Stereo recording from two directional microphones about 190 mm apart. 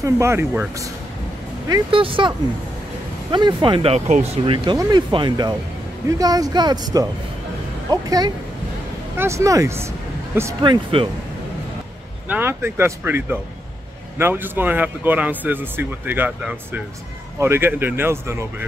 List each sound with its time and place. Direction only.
0.0 s speech: 15° right (ahead or behind)
1.7 s speech: 25° right (ahead or behind)
4.6 s speech: 25° right (ahead or behind)
10.6 s speech: 25° right (ahead or behind)
12.3 s speech: 10° right (ahead or behind)